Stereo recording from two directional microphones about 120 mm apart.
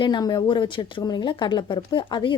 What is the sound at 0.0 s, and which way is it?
A woman's voice, 35° left (ahead or behind).